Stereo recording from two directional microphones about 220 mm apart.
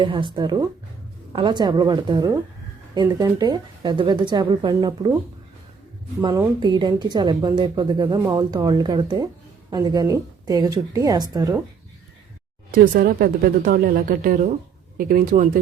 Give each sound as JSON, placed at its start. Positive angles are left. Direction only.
{"t": 0.0, "sound": "speech", "side_deg": -20}
{"t": 6.2, "sound": "speech", "side_deg": -15}
{"t": 12.7, "sound": "a woman's voice", "side_deg": -40}